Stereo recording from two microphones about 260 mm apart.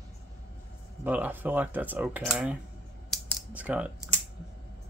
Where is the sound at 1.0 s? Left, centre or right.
Centre.